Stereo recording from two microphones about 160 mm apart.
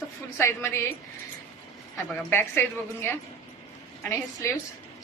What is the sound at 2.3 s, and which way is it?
Speech, 15° left (ahead or behind).